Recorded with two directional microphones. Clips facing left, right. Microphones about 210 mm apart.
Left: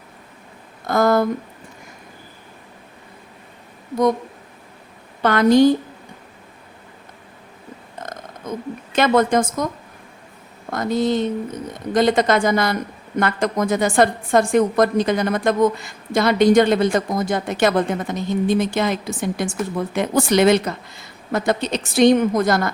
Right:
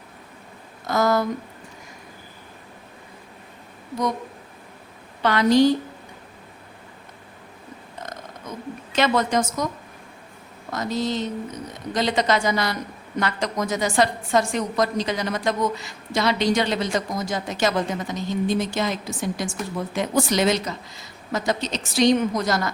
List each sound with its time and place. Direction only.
0.9 s a woman's voice: 55° left (ahead or behind)
5.2 s a woman's voice: 50° left (ahead or behind)
8.0 s speech: 50° left (ahead or behind)
10.7 s a woman's voice: 55° left (ahead or behind)